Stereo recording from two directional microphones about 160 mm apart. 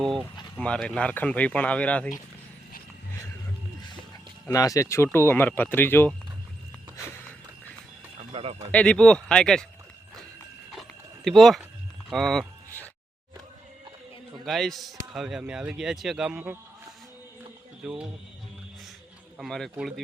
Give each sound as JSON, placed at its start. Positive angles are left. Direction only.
{"t": 0.5, "sound": "speech", "side_deg": 5}
{"t": 4.5, "sound": "speech", "side_deg": 20}
{"t": 8.3, "sound": "a sound", "side_deg": -35}
{"t": 8.7, "sound": "speech", "side_deg": 5}
{"t": 10.7, "sound": "dog", "side_deg": 0}
{"t": 12.0, "sound": "a sound", "side_deg": 0}
{"t": 14.4, "sound": "speech", "side_deg": 0}
{"t": 17.8, "sound": "speech", "side_deg": -5}
{"t": 19.4, "sound": "speech", "side_deg": 0}